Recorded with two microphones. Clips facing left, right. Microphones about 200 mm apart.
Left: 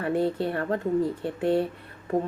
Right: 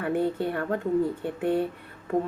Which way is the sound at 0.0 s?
30° left (ahead or behind).